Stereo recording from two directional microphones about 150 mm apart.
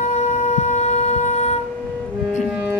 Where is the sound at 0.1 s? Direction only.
50° left (ahead or behind).